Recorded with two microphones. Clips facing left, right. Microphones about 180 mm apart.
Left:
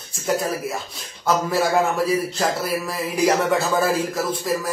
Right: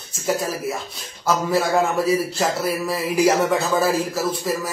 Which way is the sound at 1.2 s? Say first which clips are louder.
Even; centre (ahead or behind).